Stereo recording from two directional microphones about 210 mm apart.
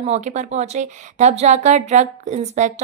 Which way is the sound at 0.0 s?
30° right (ahead or behind).